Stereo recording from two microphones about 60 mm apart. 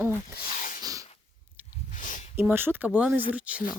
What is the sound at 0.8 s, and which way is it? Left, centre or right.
Sneeze, right.